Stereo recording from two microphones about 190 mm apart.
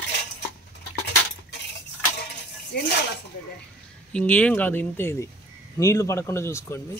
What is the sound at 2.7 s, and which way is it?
Dishes, 60° left (ahead or behind).